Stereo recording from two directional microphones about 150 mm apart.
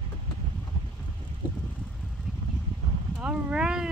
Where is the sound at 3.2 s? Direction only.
5° right (ahead or behind).